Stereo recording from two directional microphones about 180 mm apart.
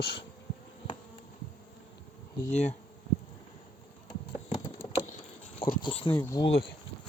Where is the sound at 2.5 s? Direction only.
40° left (ahead or behind).